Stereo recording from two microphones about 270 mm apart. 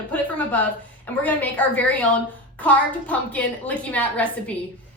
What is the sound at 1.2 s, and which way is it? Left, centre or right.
A woman's voice, centre.